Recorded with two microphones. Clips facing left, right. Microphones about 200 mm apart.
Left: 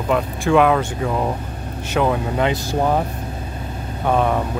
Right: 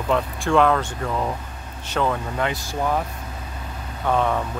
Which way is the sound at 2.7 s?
30° left (ahead or behind).